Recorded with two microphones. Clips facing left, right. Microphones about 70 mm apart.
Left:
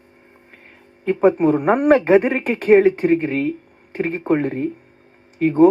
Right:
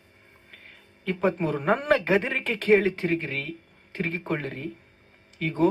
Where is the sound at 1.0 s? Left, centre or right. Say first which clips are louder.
Left 10 dB; left.